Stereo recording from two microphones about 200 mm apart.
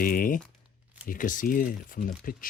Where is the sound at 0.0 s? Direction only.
45° left (ahead or behind).